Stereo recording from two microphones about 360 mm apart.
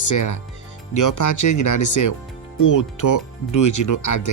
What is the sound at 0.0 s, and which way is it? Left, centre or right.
Speech, left.